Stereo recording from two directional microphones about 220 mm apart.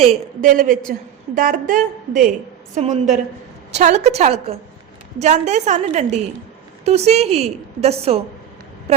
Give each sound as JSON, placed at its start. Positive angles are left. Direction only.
{"t": 0.0, "sound": "a woman's voice", "side_deg": -30}